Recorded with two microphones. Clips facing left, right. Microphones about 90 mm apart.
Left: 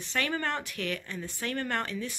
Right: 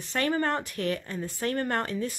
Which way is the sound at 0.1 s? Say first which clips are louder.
Right 4 dB; 35° right (ahead or behind).